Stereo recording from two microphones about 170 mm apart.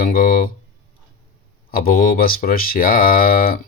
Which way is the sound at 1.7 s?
60° left (ahead or behind).